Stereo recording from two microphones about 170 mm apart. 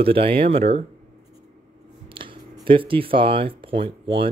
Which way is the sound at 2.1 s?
30° right (ahead or behind).